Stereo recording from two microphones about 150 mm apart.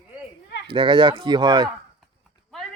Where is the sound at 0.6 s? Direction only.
35° right (ahead or behind).